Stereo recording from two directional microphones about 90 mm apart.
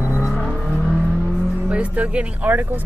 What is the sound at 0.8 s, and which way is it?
Vehicle, 5° left (ahead or behind).